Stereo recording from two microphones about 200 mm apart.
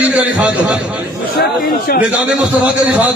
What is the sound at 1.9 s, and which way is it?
Speech, 55° left (ahead or behind).